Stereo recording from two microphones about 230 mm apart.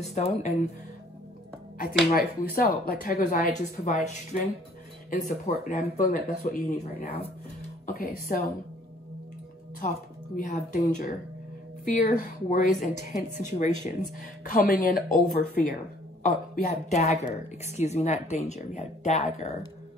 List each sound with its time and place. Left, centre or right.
0.0 s speech: left
2.1 s speech: left
9.8 s speech: left